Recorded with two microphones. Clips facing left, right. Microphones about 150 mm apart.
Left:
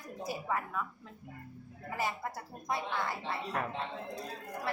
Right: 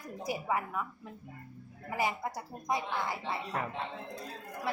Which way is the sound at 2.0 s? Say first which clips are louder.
Right 3 dB; 15° right (ahead or behind).